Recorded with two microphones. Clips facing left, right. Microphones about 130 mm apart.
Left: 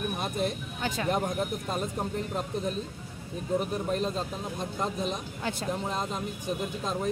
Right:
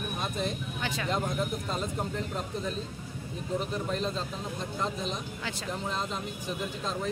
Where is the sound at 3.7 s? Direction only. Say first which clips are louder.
Left 2 dB; 45° left (ahead or behind).